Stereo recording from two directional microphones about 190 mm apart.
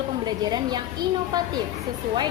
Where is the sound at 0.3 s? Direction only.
20° right (ahead or behind).